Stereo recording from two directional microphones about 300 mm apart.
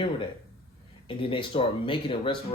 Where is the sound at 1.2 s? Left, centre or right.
Centre.